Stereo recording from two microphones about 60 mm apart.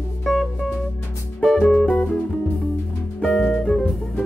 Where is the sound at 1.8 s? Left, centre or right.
Centre.